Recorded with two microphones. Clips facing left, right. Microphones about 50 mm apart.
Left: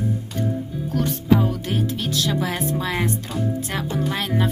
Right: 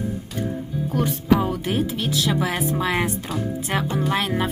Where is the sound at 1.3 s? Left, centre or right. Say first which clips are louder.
Right 1 dB; centre.